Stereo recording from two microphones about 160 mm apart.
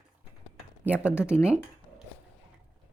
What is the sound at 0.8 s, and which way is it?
Speech, 10° right (ahead or behind).